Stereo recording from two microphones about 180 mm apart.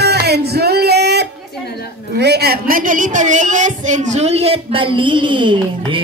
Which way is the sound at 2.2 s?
65° right (ahead or behind).